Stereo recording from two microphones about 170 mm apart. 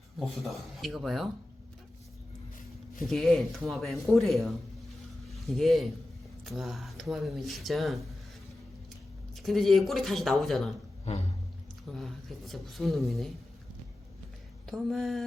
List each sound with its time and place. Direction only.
0.2 s speech: centre (ahead or behind)
3.0 s speech: centre (ahead or behind)
9.3 s speech: centre (ahead or behind)
11.1 s a sound: 40° left (ahead or behind)
11.9 s speech: centre (ahead or behind)
14.7 s speech: centre (ahead or behind)